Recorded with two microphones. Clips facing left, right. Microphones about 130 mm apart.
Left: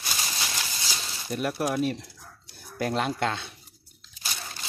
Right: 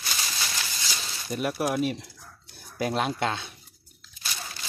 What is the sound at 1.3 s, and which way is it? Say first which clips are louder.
Speech: even; 5° right (ahead or behind).